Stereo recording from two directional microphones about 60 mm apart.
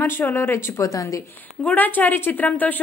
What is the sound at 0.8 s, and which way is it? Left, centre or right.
Speech, left.